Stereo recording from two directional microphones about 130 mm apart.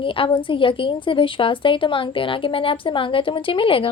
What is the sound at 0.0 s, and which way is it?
A woman's voice, 40° left (ahead or behind).